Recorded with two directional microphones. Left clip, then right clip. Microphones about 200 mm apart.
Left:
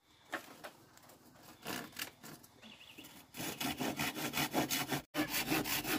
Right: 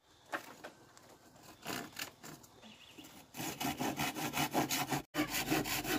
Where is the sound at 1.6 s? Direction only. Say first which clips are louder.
Right 1 dB; centre (ahead or behind).